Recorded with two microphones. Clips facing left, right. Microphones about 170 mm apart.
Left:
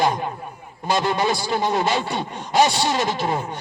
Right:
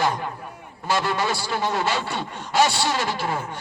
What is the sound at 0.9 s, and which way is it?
Speech, 20° left (ahead or behind).